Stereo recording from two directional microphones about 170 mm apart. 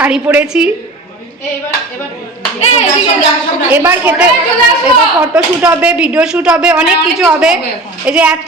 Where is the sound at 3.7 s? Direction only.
10° right (ahead or behind).